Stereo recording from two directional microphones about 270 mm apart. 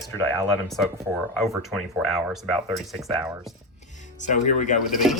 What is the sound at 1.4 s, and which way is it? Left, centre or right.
Speech, centre.